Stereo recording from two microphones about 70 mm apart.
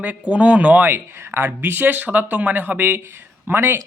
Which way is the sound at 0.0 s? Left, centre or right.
Right.